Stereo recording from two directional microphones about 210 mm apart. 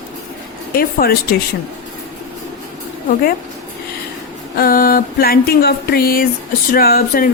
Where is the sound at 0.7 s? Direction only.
45° left (ahead or behind).